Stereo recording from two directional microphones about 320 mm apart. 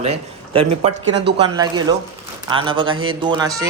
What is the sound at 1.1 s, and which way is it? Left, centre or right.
Speech, right.